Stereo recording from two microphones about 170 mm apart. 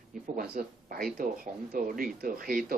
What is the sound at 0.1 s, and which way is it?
Speech, 55° right (ahead or behind).